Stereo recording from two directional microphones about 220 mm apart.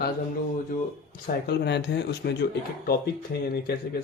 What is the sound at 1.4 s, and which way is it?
A man's voice, 50° left (ahead or behind).